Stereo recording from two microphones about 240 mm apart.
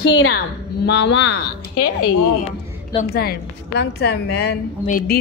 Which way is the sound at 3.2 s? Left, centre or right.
Left.